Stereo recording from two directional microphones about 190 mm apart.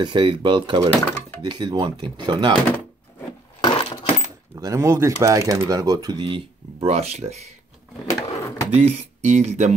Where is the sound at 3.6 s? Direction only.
25° left (ahead or behind).